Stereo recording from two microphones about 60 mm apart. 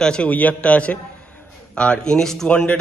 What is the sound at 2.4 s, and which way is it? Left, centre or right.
Speech, left.